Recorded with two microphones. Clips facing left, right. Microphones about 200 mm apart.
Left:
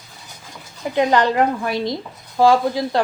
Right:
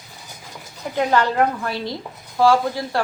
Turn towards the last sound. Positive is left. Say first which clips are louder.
# left 3 dB
turn(degrees=15)  # may be behind; listen again after turning